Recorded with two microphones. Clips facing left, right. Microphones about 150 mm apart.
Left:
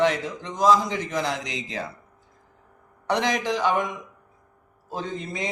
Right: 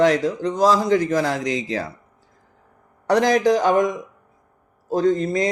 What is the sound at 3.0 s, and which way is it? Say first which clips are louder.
Speech: right 8 dB; 40° right (ahead or behind).